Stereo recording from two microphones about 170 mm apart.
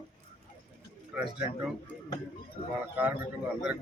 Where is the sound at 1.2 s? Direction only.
5° right (ahead or behind).